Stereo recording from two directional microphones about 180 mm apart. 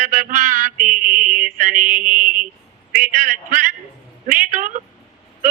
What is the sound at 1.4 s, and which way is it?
Mantra, 50° right (ahead or behind).